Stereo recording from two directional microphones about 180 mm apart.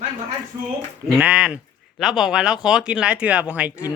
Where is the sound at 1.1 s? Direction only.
5° right (ahead or behind).